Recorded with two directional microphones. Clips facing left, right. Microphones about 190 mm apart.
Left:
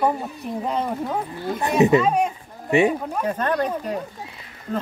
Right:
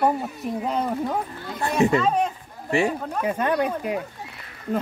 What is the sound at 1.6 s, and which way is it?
Speech, 20° left (ahead or behind).